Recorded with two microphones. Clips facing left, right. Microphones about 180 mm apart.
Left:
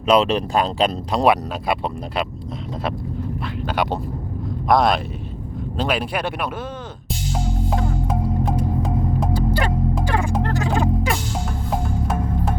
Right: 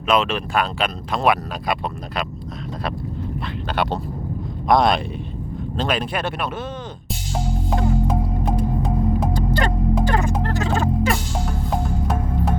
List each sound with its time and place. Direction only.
0.1 s speech: 35° left (ahead or behind)
3.8 s speech: 10° left (ahead or behind)
7.8 s music: centre (ahead or behind)
10.5 s a sound: 15° left (ahead or behind)